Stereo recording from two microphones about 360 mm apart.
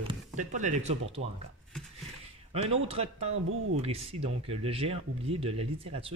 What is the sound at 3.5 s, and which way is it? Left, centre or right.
Speech, right.